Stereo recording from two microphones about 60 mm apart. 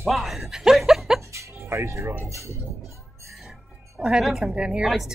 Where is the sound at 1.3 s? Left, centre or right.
Right.